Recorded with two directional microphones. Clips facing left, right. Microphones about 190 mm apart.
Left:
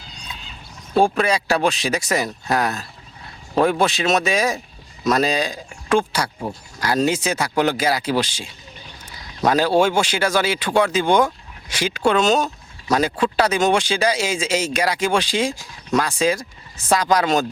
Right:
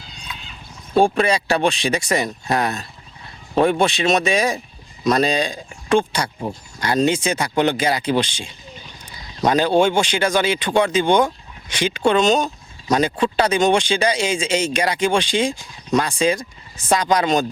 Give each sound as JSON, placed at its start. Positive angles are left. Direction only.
{"t": 0.3, "sound": "horse", "side_deg": 25}
{"t": 0.9, "sound": "speech", "side_deg": 0}